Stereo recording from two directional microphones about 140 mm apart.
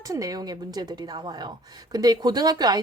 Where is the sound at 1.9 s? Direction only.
30° right (ahead or behind).